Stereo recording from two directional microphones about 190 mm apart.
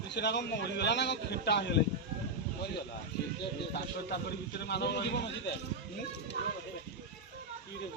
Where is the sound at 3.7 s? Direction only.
60° left (ahead or behind).